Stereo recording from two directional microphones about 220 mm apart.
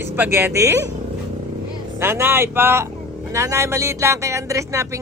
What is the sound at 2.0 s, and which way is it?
Speech, 10° right (ahead or behind).